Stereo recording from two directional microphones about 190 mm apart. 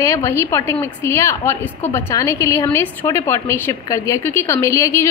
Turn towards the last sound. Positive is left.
turn(degrees=15)  # may be behind; listen again after turning